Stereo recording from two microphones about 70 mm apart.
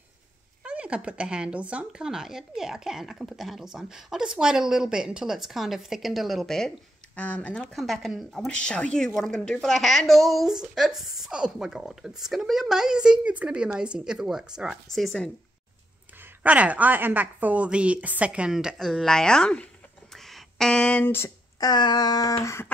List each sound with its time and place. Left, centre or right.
0.7 s a woman's voice: centre
7.2 s speech: centre
7.7 s speech: centre
8.5 s a woman's voice: centre
14.9 s speech: centre
16.4 s a woman's voice: right
18.8 s speech: centre
20.1 s a sound: centre
21.0 s speech: left
21.5 s a sound: left